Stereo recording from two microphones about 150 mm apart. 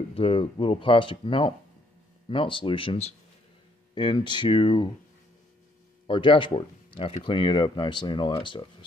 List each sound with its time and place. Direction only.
0.1 s speech: 40° left (ahead or behind)
6.0 s speech: 35° left (ahead or behind)